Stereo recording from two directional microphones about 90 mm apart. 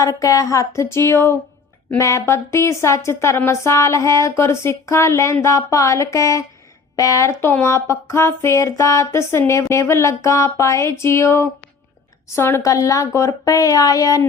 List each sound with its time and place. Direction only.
0.0 s speech: 35° left (ahead or behind)